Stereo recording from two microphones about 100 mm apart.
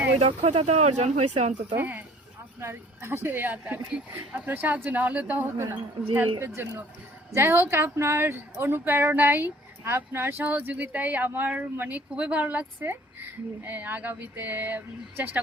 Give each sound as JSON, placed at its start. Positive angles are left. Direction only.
{"t": 0.2, "sound": "speech", "side_deg": -90}
{"t": 1.7, "sound": "a woman's voice", "side_deg": -20}